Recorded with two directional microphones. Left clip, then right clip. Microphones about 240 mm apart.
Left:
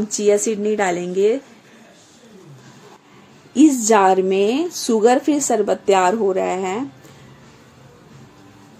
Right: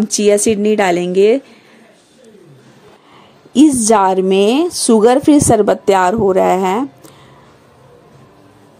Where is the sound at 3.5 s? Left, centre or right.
Right.